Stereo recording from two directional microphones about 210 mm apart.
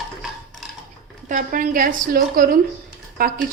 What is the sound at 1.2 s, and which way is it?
A woman's voice, 40° right (ahead or behind).